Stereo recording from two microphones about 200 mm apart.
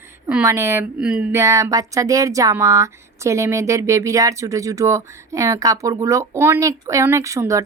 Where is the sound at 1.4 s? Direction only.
15° right (ahead or behind).